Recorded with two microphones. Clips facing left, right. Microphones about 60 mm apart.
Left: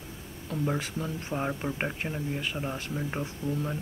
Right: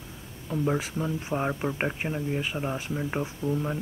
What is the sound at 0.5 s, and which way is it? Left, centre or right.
Speech, centre.